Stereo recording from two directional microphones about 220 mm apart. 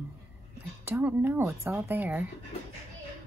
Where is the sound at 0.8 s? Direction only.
10° right (ahead or behind).